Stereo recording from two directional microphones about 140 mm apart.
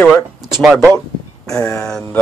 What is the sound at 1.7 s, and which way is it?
Speech, 5° left (ahead or behind).